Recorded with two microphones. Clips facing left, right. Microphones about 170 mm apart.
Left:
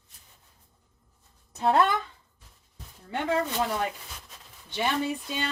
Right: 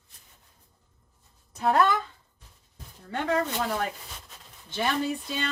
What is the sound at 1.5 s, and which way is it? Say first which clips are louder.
Speech: left 1 dB; 25° left (ahead or behind).